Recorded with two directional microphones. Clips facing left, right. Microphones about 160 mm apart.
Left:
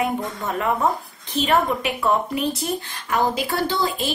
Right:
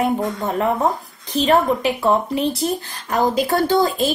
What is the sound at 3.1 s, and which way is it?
A woman's voice, 40° right (ahead or behind).